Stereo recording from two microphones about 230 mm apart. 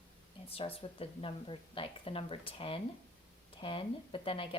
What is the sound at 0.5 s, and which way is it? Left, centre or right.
Speech, left.